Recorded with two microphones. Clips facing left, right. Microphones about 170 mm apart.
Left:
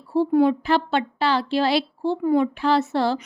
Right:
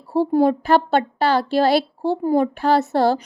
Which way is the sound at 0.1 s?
40° right (ahead or behind).